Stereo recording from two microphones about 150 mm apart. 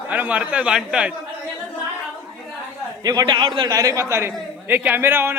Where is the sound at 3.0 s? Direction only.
25° right (ahead or behind).